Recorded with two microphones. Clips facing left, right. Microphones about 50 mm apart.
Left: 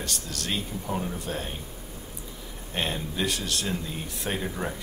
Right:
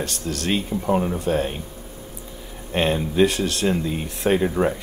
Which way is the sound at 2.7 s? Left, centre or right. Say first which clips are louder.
Right 9 dB; right.